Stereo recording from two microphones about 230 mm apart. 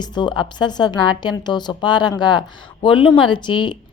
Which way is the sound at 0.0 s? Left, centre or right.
Centre.